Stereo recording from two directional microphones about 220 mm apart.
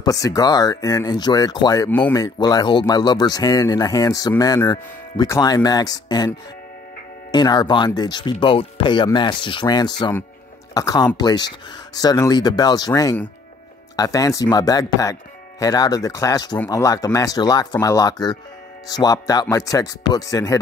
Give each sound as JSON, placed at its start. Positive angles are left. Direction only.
{"t": 0.0, "sound": "speech", "side_deg": 15}